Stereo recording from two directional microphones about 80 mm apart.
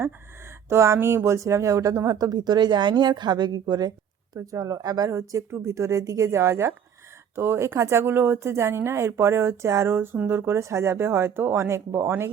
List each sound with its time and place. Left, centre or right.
0.7 s a woman's voice: right
4.4 s speech: right
5.5 s speech: right